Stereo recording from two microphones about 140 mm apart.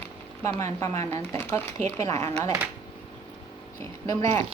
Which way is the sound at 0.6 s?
20° left (ahead or behind).